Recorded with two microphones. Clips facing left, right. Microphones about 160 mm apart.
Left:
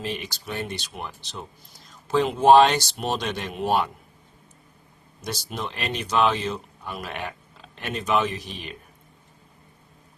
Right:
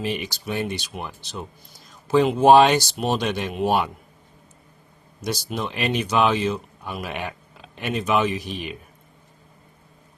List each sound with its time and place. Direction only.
0.0 s speech: 10° right (ahead or behind)
5.2 s speech: 5° right (ahead or behind)